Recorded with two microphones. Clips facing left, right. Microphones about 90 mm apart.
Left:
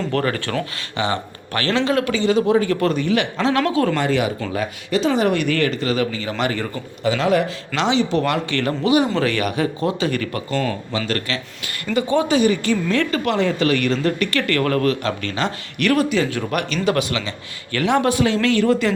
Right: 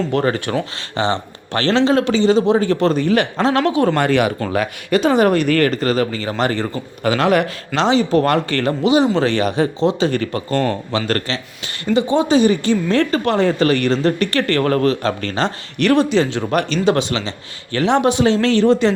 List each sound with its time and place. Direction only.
0.1 s speech: 20° right (ahead or behind)
0.9 s a woman's voice: 30° right (ahead or behind)
3.6 s speech: 20° right (ahead or behind)
3.9 s speech: 60° right (ahead or behind)
5.3 s a woman's voice: 45° right (ahead or behind)
7.0 s speech: 65° right (ahead or behind)
7.8 s a woman's voice: 40° right (ahead or behind)
8.6 s a woman's voice: 25° right (ahead or behind)